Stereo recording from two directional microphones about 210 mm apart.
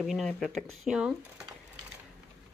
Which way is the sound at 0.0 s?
Centre (ahead or behind).